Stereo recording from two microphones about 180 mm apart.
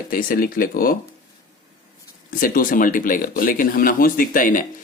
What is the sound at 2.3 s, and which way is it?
Speech, 55° left (ahead or behind).